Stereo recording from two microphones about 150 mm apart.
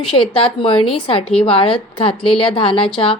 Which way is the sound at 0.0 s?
35° left (ahead or behind).